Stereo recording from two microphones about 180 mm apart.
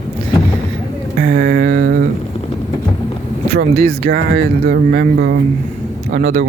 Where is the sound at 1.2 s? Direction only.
50° right (ahead or behind).